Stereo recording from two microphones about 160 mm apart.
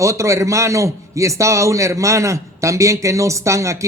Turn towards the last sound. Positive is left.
turn(degrees=-20)  # may be behind; listen again after turning